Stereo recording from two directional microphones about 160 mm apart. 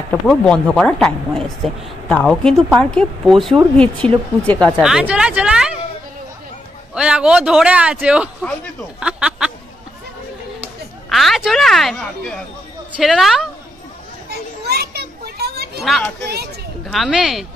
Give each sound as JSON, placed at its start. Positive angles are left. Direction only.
{"t": 0.1, "sound": "speech", "side_deg": 5}
{"t": 4.7, "sound": "speech", "side_deg": -5}
{"t": 6.9, "sound": "speech", "side_deg": -5}
{"t": 9.0, "sound": "a sound", "side_deg": -5}
{"t": 10.6, "sound": "speech", "side_deg": 0}
{"t": 14.7, "sound": "children playing", "side_deg": -80}
{"t": 16.8, "sound": "speech", "side_deg": 0}